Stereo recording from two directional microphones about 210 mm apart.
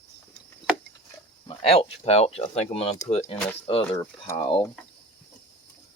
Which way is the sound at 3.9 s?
15° left (ahead or behind).